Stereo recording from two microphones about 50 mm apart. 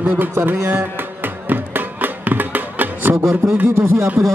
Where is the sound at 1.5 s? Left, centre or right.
Right.